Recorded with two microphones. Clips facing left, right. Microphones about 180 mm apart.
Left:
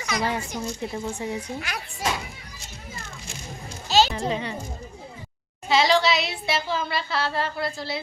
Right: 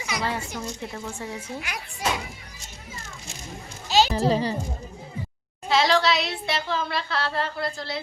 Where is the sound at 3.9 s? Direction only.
15° right (ahead or behind).